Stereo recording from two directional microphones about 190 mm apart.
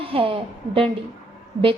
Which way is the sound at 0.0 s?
30° right (ahead or behind).